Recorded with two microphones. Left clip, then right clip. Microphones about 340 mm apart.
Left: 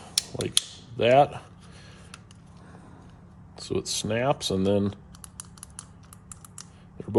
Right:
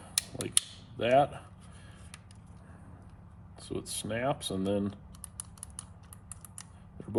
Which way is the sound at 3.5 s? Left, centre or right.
Left.